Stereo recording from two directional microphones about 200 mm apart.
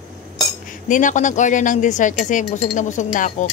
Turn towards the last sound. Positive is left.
turn(degrees=40)  # may be behind; listen again after turning